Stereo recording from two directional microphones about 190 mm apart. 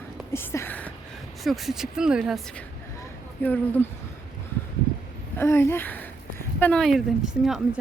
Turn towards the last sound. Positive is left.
turn(degrees=-5)  # may be behind; listen again after turning